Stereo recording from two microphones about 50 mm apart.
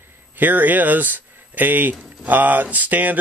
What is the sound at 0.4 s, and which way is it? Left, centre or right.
Speech, right.